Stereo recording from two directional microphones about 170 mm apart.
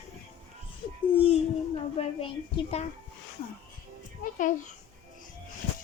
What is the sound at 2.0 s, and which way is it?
Speech, 35° left (ahead or behind).